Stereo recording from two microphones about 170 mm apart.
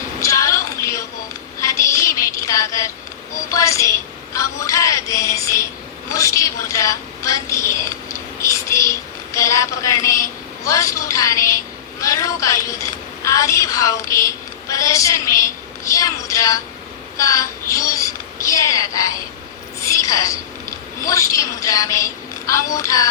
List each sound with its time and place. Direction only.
0.2 s a sound: 20° left (ahead or behind)
1.6 s child singing: 20° left (ahead or behind)
3.5 s a sound: 20° left (ahead or behind)
4.4 s synthetic singing: 20° left (ahead or behind)
6.1 s a woman's voice: 20° left (ahead or behind)
8.4 s whispering: 15° left (ahead or behind)
9.3 s a woman's voice: 20° left (ahead or behind)